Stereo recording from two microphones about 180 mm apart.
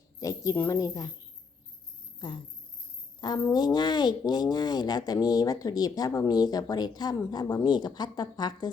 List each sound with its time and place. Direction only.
0.2 s a woman's voice: 20° left (ahead or behind)
2.1 s speech: 25° left (ahead or behind)